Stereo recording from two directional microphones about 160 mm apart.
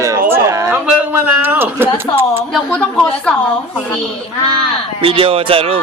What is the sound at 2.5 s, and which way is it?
Speech, 5° left (ahead or behind).